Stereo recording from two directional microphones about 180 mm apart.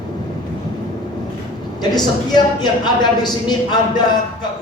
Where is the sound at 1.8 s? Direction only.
25° left (ahead or behind).